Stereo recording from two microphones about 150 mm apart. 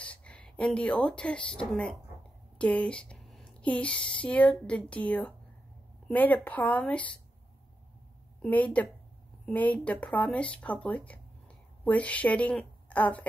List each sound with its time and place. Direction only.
0.0 s speech: 10° left (ahead or behind)
8.4 s a woman's voice: 10° left (ahead or behind)